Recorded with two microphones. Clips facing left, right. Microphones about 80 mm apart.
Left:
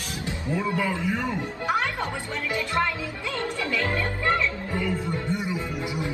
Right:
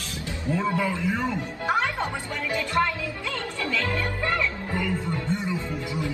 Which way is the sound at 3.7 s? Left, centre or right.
Left.